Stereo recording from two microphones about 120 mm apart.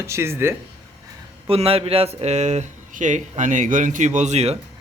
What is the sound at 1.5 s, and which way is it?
Speech, 55° right (ahead or behind).